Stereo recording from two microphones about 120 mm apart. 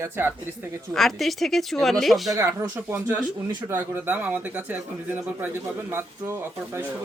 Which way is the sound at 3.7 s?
15° right (ahead or behind).